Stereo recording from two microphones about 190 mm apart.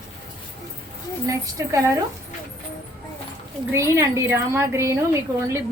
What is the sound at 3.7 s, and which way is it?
A woman's voice, 15° right (ahead or behind).